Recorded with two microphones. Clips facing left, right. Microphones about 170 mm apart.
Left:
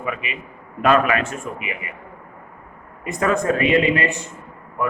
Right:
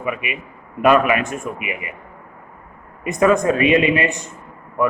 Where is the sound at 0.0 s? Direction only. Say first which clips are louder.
Right 3 dB; 15° right (ahead or behind).